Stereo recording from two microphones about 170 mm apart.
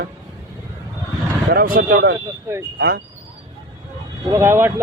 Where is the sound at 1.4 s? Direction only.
60° right (ahead or behind).